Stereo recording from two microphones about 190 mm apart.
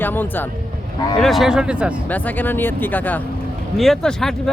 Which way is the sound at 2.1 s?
10° left (ahead or behind).